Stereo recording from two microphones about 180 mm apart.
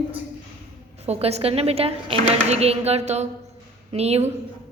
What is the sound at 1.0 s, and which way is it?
Speech, 35° right (ahead or behind).